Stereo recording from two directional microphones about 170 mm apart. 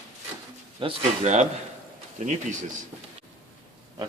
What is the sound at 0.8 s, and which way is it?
Speech, 35° right (ahead or behind).